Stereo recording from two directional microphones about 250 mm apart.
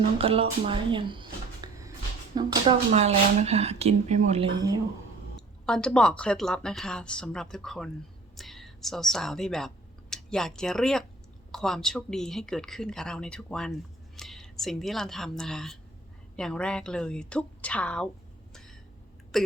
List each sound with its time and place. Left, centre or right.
0.2 s speech: right
5.6 s speech: centre
18.5 s a sound: centre